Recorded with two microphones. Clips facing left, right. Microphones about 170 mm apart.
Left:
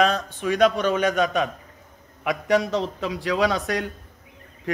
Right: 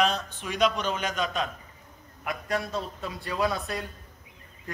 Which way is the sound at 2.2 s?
90° left.